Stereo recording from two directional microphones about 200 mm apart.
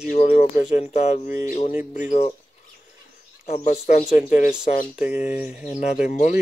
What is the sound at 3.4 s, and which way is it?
Speech, 30° left (ahead or behind).